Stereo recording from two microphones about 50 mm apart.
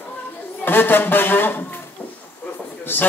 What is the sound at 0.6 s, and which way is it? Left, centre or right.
A man's voice, left.